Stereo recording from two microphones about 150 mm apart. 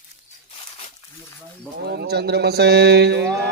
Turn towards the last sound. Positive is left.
turn(degrees=-90)